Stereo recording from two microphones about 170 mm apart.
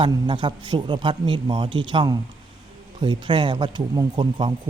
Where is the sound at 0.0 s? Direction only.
30° right (ahead or behind).